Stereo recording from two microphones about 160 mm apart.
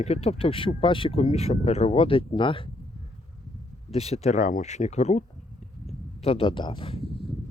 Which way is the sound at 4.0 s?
40° left (ahead or behind).